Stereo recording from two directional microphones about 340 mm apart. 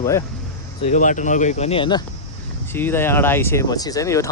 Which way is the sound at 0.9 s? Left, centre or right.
Left.